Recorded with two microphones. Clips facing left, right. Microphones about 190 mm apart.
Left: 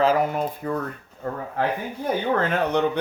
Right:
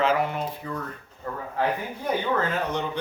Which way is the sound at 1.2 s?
60° left (ahead or behind).